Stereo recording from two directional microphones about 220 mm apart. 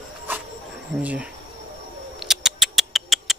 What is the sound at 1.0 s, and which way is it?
Speech, 5° right (ahead or behind).